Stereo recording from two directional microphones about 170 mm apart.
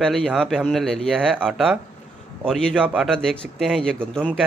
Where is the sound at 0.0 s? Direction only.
Centre (ahead or behind).